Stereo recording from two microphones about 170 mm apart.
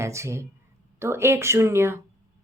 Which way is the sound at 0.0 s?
15° right (ahead or behind).